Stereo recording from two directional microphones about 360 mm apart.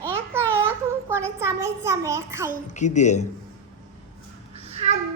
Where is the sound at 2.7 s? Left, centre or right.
Centre.